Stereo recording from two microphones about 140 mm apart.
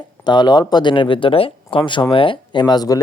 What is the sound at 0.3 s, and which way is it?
Speech, 30° left (ahead or behind).